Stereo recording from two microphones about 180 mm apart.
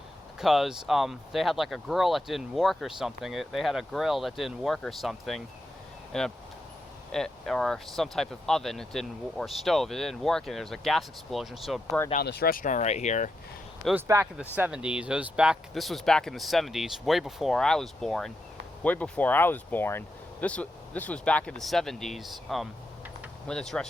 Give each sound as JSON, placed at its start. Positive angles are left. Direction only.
{"t": 0.3, "sound": "speech", "side_deg": 0}
{"t": 12.2, "sound": "speech", "side_deg": 60}
{"t": 13.9, "sound": "speech", "side_deg": -15}